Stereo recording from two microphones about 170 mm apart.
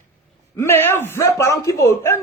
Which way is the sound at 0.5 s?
15° left (ahead or behind).